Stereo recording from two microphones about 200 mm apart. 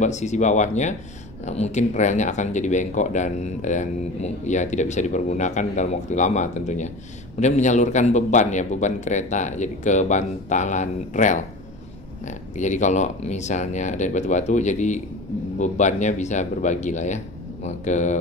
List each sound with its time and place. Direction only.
0.0 s speech: 35° left (ahead or behind)